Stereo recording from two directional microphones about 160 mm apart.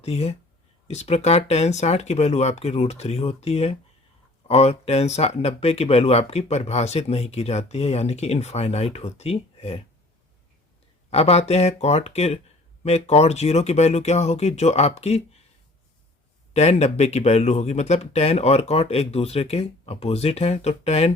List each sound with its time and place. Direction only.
0.0 s speech: 40° left (ahead or behind)
11.1 s speech: 40° left (ahead or behind)
16.5 s speech: 40° left (ahead or behind)